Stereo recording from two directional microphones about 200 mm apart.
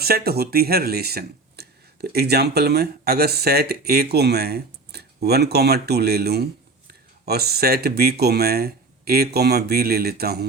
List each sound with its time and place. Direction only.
0.0 s speech: 50° right (ahead or behind)